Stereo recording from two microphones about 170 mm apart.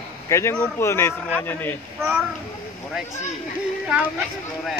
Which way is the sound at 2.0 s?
15° right (ahead or behind).